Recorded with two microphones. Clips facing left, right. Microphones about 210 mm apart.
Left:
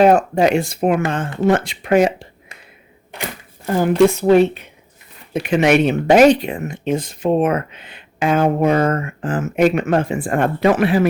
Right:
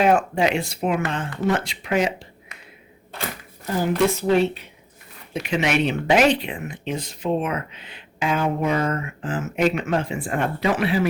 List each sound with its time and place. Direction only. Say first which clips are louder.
0.0 s speech: left 6 dB; 40° left (ahead or behind)
3.7 s speech: left 7 dB; 50° left (ahead or behind)